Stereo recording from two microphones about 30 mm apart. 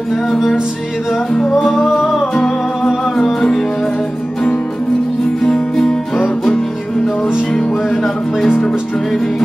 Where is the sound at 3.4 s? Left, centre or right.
Centre.